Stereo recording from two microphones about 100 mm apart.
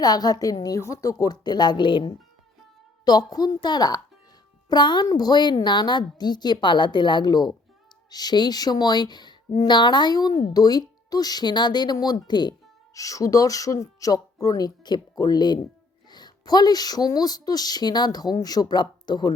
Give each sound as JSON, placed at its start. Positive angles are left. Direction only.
{"t": 0.0, "sound": "speech", "side_deg": 40}
{"t": 3.0, "sound": "speech", "side_deg": 45}
{"t": 12.9, "sound": "speech", "side_deg": 35}